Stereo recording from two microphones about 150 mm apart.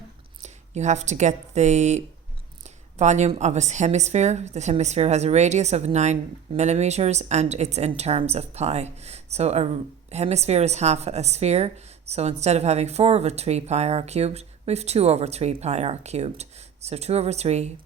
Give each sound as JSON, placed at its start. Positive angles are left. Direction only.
{"t": 0.4, "sound": "speech", "side_deg": -50}